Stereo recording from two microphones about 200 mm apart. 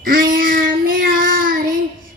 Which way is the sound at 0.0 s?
45° right (ahead or behind).